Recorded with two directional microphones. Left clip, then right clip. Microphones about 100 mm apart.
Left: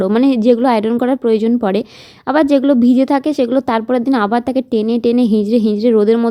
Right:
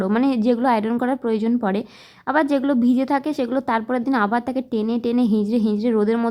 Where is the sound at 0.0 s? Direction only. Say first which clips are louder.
Left 7 dB; 35° left (ahead or behind).